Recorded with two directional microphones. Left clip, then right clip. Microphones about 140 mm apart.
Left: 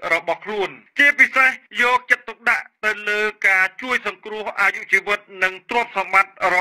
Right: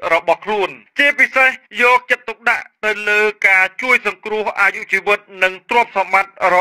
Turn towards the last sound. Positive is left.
turn(degrees=-35)  # may be behind; listen again after turning